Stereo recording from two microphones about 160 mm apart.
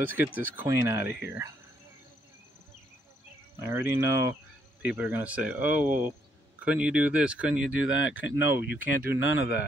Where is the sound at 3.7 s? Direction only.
15° right (ahead or behind).